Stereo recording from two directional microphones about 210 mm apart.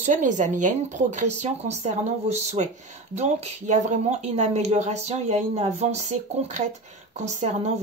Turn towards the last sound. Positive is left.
turn(degrees=-30)  # may be behind; listen again after turning